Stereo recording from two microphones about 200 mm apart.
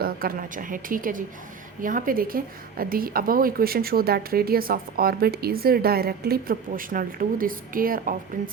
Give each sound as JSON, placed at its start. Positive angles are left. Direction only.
{"t": 0.0, "sound": "a woman's voice", "side_deg": -45}